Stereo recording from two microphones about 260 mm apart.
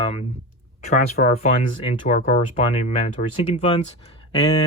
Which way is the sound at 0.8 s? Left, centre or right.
Left.